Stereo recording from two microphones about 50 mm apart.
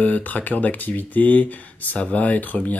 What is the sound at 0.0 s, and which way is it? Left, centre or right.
Speech, left.